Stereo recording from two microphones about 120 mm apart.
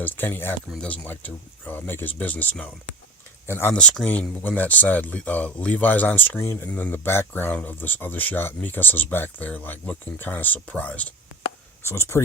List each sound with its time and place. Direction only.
0.0 s speech: 15° left (ahead or behind)